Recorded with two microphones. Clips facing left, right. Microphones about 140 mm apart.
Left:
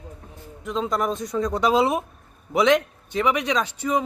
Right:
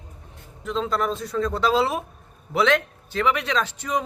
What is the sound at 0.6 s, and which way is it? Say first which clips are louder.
A man's voice: even; 10° left (ahead or behind).